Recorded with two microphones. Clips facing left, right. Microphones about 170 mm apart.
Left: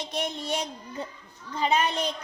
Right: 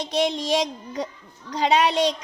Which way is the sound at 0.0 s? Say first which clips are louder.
Right 8 dB; 90° right.